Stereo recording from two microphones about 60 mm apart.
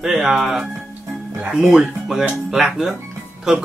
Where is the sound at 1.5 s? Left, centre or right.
Centre.